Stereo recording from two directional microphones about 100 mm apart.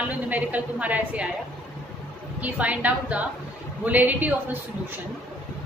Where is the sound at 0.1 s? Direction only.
15° right (ahead or behind).